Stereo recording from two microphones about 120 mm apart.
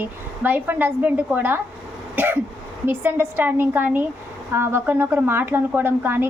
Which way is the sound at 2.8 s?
15° right (ahead or behind).